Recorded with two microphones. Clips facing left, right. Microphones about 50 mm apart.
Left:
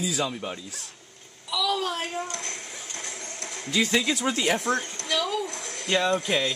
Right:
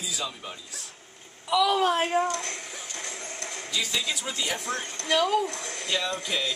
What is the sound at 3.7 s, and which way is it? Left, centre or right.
Speech, left.